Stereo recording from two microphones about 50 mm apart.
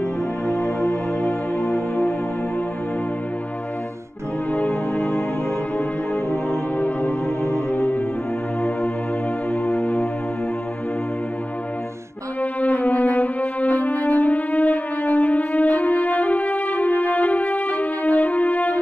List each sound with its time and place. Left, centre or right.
0.5 s music: centre
4.6 s music: centre
6.8 s music: left
9.5 s music: centre
12.4 s music: left